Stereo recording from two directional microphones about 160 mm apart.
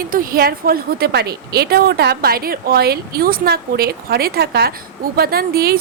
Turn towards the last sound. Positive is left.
turn(degrees=-70)  # may be behind; listen again after turning